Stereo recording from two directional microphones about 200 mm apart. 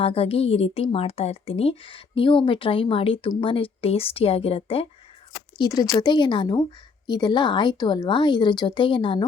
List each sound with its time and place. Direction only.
0.0 s speech: 30° left (ahead or behind)